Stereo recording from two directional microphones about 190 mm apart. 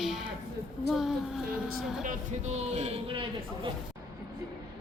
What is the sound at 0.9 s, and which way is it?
Speech, centre (ahead or behind).